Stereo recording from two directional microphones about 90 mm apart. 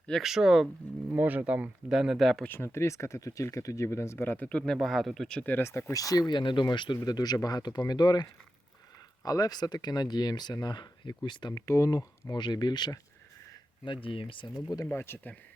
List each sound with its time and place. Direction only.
0.2 s speech: 5° right (ahead or behind)
1.1 s speech: 20° right (ahead or behind)
1.9 s speech: 5° right (ahead or behind)
2.4 s speech: 25° left (ahead or behind); by 5.4 s 5° left (ahead or behind)
5.4 s speech: 20° left (ahead or behind)
5.9 s speech: 40° left (ahead or behind); by 11.5 s 60° left (ahead or behind)
11.5 s speech: 40° left (ahead or behind)
12.4 s speech: 55° left (ahead or behind)
13.8 s speech: 75° left (ahead or behind)
14.8 s speech: 25° left (ahead or behind)